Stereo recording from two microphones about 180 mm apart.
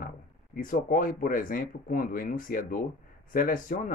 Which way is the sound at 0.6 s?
50° left (ahead or behind).